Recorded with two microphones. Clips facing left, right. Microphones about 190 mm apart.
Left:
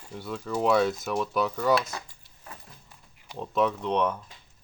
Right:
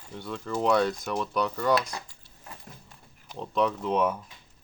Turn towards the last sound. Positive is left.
turn(degrees=-5)  # may be behind; listen again after turning